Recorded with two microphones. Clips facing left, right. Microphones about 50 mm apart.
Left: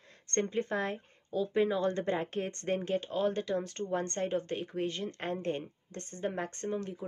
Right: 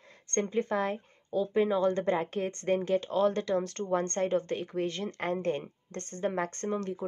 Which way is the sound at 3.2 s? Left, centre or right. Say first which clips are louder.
Right 4 dB; right.